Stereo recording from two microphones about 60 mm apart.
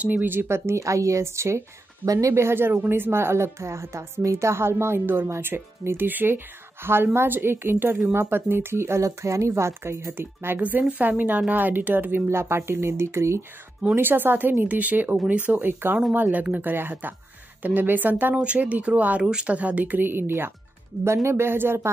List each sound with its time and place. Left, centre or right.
0.0 s speech: right
2.0 s speech: right
10.1 s speech: right
10.6 s speech: right
12.3 s speech: right
13.9 s speech: right
21.0 s speech: right